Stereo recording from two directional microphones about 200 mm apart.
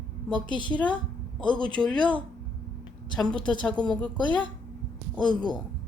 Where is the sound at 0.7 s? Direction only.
5° left (ahead or behind).